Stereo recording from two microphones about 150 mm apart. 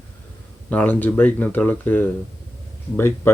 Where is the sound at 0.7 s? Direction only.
10° left (ahead or behind).